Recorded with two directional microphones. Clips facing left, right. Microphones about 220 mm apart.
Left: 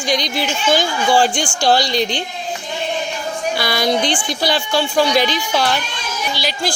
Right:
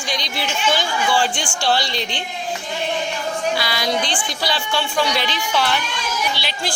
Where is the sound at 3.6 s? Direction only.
50° left (ahead or behind).